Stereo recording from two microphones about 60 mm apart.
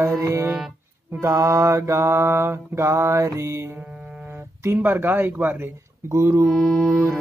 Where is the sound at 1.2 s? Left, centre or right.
Right.